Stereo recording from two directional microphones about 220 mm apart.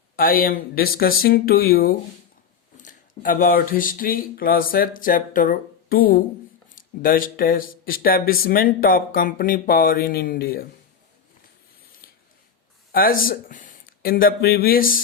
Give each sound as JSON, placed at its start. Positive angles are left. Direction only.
{"t": 0.2, "sound": "speech", "side_deg": 40}
{"t": 12.9, "sound": "speech", "side_deg": 40}